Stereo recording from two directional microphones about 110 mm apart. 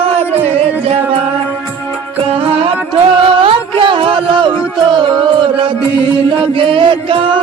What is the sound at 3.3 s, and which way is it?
Music, 55° right (ahead or behind).